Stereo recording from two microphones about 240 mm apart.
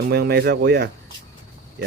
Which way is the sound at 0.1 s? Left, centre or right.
Right.